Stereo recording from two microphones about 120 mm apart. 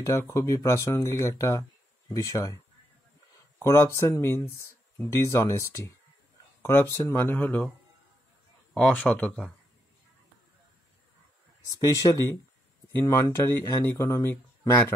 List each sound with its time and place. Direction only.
0.0 s speech: 25° left (ahead or behind)
8.7 s speech: 5° left (ahead or behind)
11.7 s speech: 30° left (ahead or behind)